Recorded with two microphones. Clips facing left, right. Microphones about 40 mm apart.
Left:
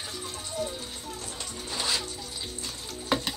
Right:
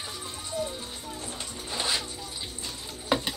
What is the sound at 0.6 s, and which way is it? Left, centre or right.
Music, centre.